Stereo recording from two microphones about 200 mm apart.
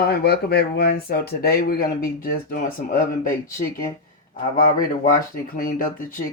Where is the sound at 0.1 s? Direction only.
55° left (ahead or behind).